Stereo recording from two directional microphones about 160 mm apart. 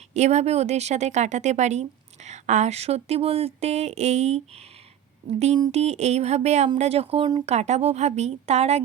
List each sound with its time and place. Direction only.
0.1 s speech: 45° right (ahead or behind)
5.7 s speech: 40° right (ahead or behind)